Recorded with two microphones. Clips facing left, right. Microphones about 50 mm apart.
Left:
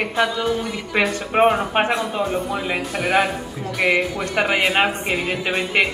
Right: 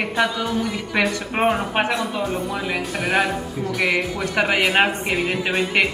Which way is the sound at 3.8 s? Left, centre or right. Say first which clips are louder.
Left 3 dB; centre.